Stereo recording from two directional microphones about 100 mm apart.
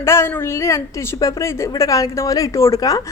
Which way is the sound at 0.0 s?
25° left (ahead or behind).